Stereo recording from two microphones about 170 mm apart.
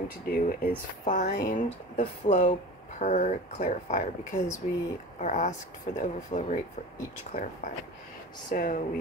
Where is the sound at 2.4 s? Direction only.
45° left (ahead or behind).